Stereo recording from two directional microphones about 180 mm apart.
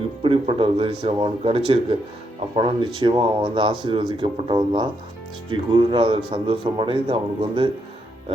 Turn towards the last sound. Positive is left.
turn(degrees=-30)  # may be behind; listen again after turning